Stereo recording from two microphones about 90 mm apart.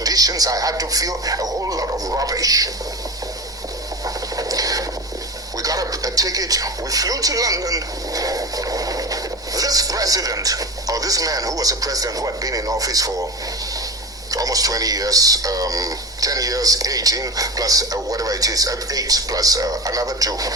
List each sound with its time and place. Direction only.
0.0 s speech: 45° right (ahead or behind)
4.0 s vehicle: 40° right (ahead or behind)
5.6 s speech: 40° right (ahead or behind)
14.3 s speech: 40° right (ahead or behind)